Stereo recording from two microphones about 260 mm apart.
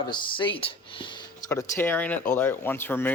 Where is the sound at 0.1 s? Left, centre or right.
Centre.